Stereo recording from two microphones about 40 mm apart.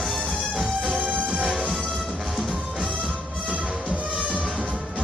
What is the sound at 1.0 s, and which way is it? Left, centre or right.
Music, right.